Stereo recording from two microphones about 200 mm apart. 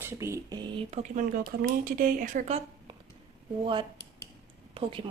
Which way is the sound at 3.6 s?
25° right (ahead or behind).